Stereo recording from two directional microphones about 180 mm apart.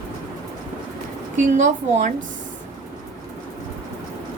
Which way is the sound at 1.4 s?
40° right (ahead or behind).